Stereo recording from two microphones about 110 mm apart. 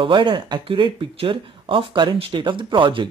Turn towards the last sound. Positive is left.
turn(degrees=-45)  # may be behind; listen again after turning